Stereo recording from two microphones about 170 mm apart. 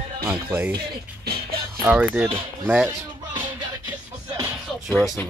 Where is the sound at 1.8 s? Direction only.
10° right (ahead or behind).